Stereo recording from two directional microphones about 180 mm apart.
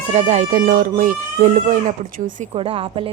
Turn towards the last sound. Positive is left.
turn(degrees=-30)  # may be behind; listen again after turning